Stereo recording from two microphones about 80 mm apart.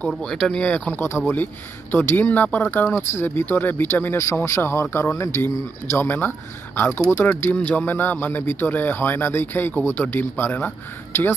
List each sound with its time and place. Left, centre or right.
0.1 s a man's voice: centre; by 7.0 s left
7.0 s a man's voice: centre